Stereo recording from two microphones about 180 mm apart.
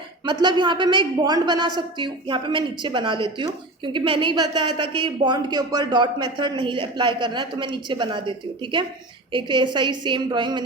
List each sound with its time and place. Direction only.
0.3 s a man's voice: 25° right (ahead or behind)
9.3 s a man's voice: 25° right (ahead or behind)